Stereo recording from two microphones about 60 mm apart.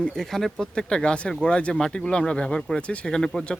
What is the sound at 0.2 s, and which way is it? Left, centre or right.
Speech, centre.